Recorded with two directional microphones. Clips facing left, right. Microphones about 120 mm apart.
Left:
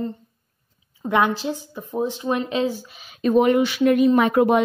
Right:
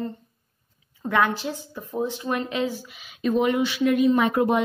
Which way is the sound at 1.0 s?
20° left (ahead or behind).